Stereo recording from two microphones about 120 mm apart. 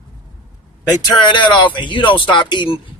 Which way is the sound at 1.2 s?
40° left (ahead or behind).